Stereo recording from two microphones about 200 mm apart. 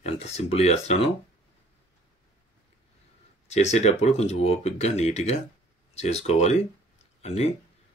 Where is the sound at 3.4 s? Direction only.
35° left (ahead or behind).